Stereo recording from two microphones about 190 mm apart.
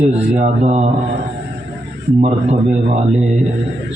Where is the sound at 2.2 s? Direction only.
35° right (ahead or behind).